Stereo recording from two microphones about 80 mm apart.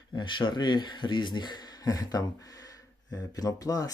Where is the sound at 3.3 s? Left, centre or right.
Left.